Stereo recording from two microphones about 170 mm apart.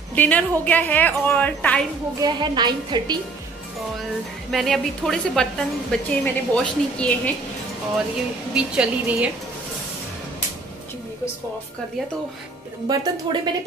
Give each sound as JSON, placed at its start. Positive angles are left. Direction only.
{"t": 0.1, "sound": "a woman's voice", "side_deg": 10}
{"t": 2.1, "sound": "a woman's voice", "side_deg": -25}
{"t": 4.5, "sound": "a woman's voice", "side_deg": 0}
{"t": 8.5, "sound": "a woman's voice", "side_deg": -5}
{"t": 12.8, "sound": "a woman's voice", "side_deg": -25}